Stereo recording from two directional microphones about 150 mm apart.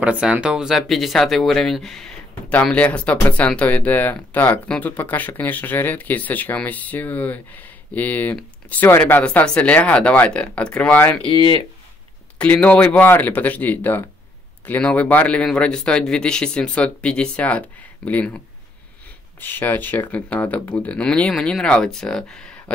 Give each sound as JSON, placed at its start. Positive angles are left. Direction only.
{"t": 0.0, "sound": "speech", "side_deg": -10}
{"t": 11.2, "sound": "speech", "side_deg": 35}
{"t": 12.4, "sound": "speech", "side_deg": 10}
{"t": 19.4, "sound": "speech", "side_deg": 15}